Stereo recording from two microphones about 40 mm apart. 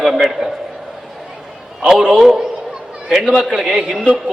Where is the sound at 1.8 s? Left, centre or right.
Right.